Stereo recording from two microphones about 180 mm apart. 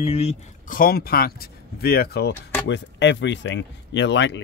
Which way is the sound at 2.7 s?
80° left.